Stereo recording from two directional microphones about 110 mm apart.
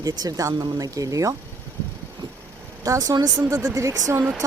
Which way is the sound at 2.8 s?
30° right (ahead or behind).